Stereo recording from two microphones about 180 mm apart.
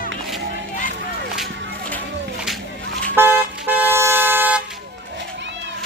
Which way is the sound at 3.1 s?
10° right (ahead or behind).